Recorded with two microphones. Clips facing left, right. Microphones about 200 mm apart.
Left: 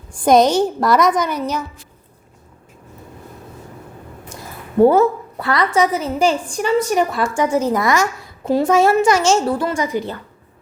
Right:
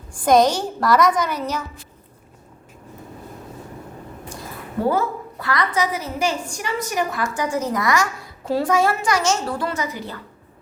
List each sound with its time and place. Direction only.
0.3 s a woman's voice: 20° left (ahead or behind)
4.9 s a woman's voice: 25° left (ahead or behind)